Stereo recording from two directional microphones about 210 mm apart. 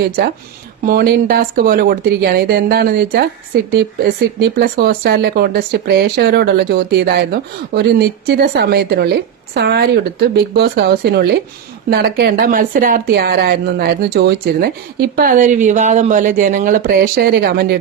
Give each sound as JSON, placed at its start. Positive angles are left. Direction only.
{"t": 0.9, "sound": "speech", "side_deg": -50}